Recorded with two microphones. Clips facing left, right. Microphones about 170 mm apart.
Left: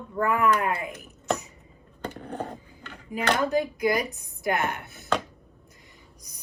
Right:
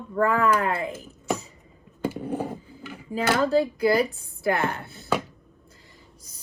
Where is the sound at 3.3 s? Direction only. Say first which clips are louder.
Right 3 dB; 15° left (ahead or behind).